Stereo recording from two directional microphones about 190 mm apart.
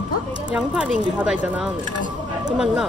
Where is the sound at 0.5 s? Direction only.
5° right (ahead or behind).